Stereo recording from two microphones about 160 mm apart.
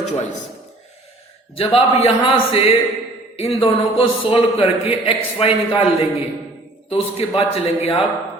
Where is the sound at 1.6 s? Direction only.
35° left (ahead or behind).